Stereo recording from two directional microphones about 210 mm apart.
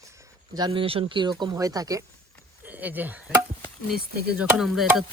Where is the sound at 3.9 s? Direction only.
45° right (ahead or behind).